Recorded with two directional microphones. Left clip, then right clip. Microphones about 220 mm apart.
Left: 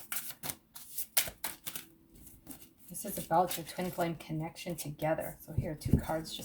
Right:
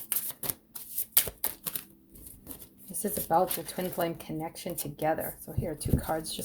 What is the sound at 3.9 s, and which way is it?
Speech, 55° right (ahead or behind).